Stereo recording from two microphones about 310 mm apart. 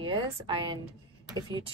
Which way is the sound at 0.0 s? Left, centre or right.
Centre.